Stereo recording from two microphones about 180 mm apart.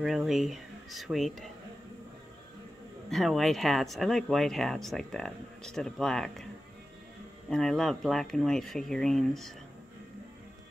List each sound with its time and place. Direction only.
0.0 s speech: centre (ahead or behind)
3.1 s speech: centre (ahead or behind)
7.4 s speech: centre (ahead or behind)